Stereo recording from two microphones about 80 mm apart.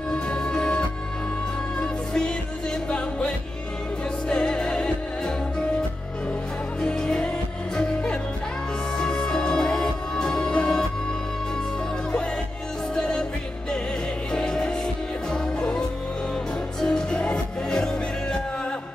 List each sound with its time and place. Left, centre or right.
0.1 s music: centre
6.8 s music: centre
12.9 s music: centre
14.3 s music: centre
16.8 s music: centre